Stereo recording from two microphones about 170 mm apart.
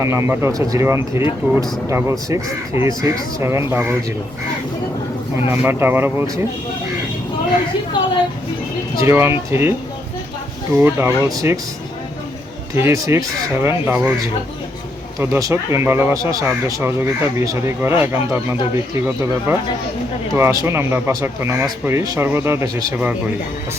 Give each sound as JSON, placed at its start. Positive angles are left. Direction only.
{"t": 0.0, "sound": "speech", "side_deg": -15}
{"t": 5.5, "sound": "speech", "side_deg": -10}
{"t": 8.0, "sound": "a woman's voice", "side_deg": 30}
{"t": 9.0, "sound": "speech", "side_deg": -15}
{"t": 10.8, "sound": "speech", "side_deg": -10}
{"t": 12.7, "sound": "speech", "side_deg": -15}